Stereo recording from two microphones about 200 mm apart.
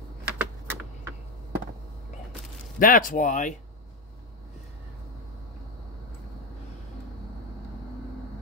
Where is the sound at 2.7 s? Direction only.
45° left (ahead or behind).